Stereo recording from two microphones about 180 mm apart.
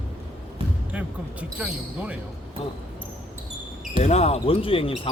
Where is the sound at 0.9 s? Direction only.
5° right (ahead or behind).